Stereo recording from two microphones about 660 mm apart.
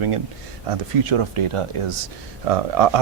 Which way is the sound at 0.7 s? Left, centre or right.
Right.